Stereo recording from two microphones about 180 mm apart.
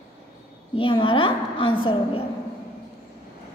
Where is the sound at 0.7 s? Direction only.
30° left (ahead or behind).